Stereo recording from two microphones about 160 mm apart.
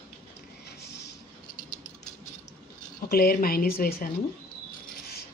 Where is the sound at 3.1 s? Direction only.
70° left (ahead or behind).